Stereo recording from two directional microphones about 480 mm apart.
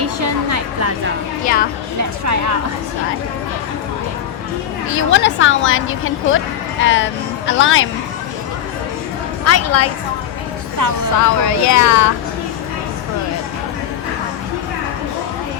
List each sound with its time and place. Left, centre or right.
0.0 s music: right
2.2 s a woman's voice: right
4.9 s a woman's voice: left
9.4 s speech: left
10.8 s a woman's voice: right
11.2 s speech: left